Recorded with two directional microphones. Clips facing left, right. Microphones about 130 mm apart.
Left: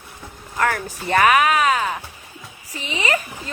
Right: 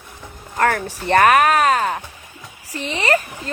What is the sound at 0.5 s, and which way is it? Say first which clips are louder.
Speech: right 3 dB; 50° right (ahead or behind).